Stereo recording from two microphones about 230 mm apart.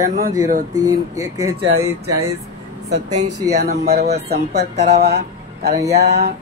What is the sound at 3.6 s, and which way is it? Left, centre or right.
Speech, right.